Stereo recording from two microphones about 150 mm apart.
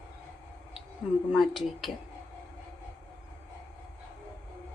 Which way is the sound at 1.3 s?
Centre (ahead or behind).